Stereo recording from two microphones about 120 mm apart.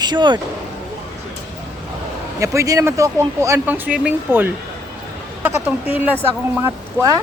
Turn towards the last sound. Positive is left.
turn(degrees=-20)  # may be behind; listen again after turning